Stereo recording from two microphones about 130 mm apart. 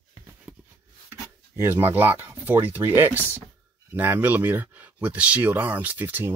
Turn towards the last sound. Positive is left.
turn(degrees=-15)  # may be behind; listen again after turning